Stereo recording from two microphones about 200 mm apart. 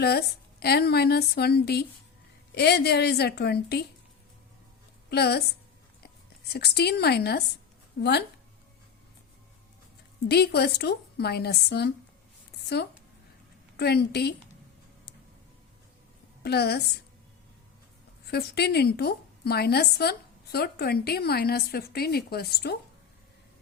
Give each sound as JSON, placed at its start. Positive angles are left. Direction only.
{"t": 0.0, "sound": "a woman's voice", "side_deg": 55}
{"t": 5.0, "sound": "a woman's voice", "side_deg": 55}
{"t": 6.5, "sound": "a woman's voice", "side_deg": 55}
{"t": 10.2, "sound": "a woman's voice", "side_deg": 55}
{"t": 16.4, "sound": "a woman's voice", "side_deg": 55}
{"t": 18.3, "sound": "a woman's voice", "side_deg": 55}